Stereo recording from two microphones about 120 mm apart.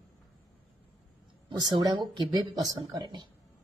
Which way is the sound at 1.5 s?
35° right (ahead or behind).